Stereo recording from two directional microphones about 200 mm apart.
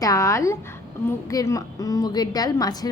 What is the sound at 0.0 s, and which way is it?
A woman's voice, 15° left (ahead or behind).